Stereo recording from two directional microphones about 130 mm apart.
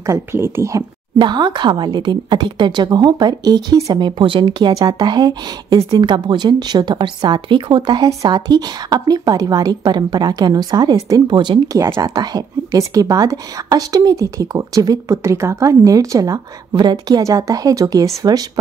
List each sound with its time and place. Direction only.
0.0 s speech: 20° right (ahead or behind)
1.2 s a woman's voice: 35° right (ahead or behind)